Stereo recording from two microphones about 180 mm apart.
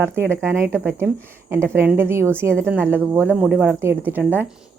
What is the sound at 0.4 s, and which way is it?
A woman's voice, 15° right (ahead or behind).